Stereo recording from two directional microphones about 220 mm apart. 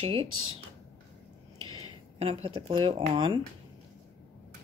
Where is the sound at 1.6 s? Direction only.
75° right (ahead or behind).